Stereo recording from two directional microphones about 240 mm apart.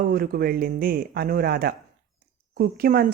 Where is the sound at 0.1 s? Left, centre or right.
Right.